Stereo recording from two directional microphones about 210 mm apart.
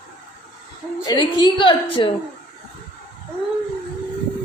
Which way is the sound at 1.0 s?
25° left (ahead or behind).